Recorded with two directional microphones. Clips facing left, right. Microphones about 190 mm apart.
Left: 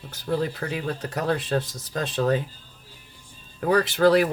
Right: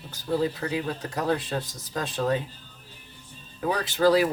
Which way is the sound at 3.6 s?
60° left (ahead or behind).